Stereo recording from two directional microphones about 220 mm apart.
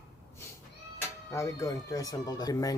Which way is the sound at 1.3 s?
15° left (ahead or behind).